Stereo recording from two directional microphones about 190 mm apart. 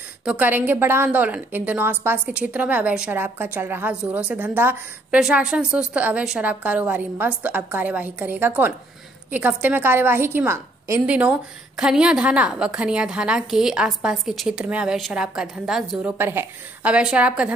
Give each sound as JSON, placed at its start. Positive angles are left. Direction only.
{"t": 0.2, "sound": "a woman's voice", "side_deg": -5}